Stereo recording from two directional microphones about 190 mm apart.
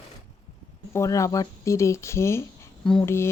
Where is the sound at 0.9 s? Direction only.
15° left (ahead or behind).